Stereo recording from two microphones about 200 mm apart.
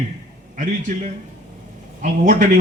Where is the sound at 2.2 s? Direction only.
40° right (ahead or behind).